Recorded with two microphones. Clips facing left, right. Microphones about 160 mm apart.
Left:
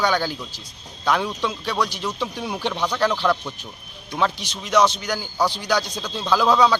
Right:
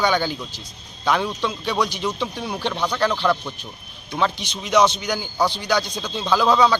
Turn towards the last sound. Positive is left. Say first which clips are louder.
# even
turn(degrees=5)  # may be behind; listen again after turning